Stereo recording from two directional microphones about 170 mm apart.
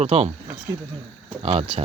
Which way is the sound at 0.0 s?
40° right (ahead or behind).